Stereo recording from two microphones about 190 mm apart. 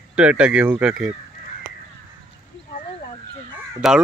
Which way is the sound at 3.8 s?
Centre (ahead or behind).